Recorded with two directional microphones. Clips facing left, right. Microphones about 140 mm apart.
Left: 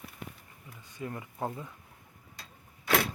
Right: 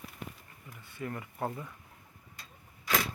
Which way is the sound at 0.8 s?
15° left (ahead or behind).